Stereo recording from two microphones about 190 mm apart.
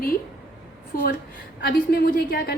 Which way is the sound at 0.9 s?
50° left (ahead or behind).